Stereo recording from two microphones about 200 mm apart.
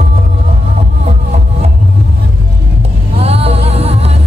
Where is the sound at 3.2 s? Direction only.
30° right (ahead or behind).